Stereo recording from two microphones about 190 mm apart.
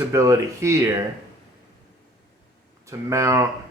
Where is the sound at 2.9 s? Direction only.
15° right (ahead or behind).